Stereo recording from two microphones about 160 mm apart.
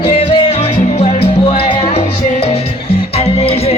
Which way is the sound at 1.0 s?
35° left (ahead or behind).